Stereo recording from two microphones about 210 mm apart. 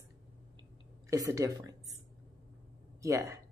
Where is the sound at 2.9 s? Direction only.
15° right (ahead or behind).